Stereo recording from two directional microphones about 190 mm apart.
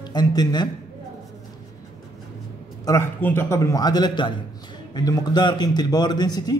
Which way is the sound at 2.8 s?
15° left (ahead or behind).